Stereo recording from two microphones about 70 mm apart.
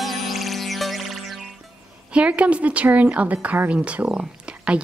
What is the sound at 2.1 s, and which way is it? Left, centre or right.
A woman's voice, centre.